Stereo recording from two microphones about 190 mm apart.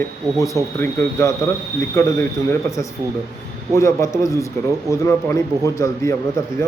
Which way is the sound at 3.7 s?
15° left (ahead or behind).